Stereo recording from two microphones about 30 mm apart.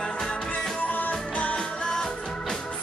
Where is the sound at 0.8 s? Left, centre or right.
Left.